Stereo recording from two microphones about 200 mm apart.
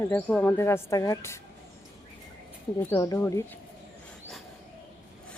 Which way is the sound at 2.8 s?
15° left (ahead or behind).